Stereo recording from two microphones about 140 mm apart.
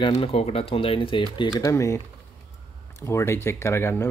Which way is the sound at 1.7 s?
20° left (ahead or behind).